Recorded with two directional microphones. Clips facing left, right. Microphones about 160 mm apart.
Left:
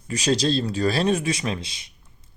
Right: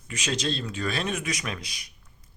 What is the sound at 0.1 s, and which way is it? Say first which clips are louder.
A man's voice: left 8 dB; 35° left (ahead or behind).